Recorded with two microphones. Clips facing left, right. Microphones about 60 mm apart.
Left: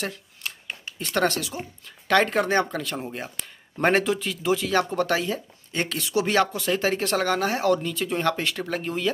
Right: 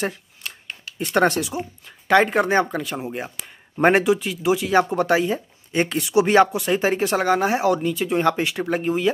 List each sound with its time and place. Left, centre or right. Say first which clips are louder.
0.9 s speech: right 5 dB; centre